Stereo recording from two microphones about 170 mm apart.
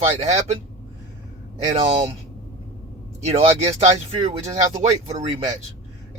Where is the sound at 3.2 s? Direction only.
35° right (ahead or behind).